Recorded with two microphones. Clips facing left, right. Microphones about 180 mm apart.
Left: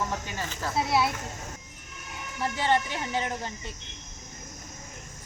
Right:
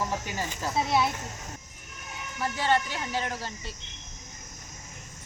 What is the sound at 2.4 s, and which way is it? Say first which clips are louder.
Speech: even; 20° left (ahead or behind).